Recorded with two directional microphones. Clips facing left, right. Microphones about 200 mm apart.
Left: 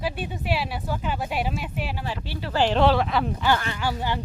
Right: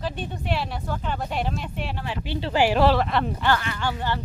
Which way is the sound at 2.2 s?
20° right (ahead or behind).